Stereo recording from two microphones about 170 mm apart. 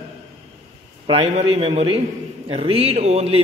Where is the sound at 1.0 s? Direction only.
35° right (ahead or behind).